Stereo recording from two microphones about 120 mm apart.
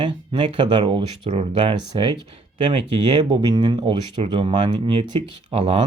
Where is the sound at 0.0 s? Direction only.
45° right (ahead or behind).